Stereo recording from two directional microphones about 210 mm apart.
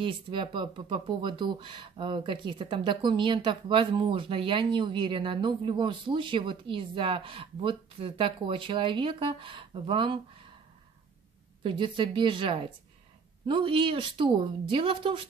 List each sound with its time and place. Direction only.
0.0 s speech: 25° right (ahead or behind)
11.6 s speech: 25° right (ahead or behind)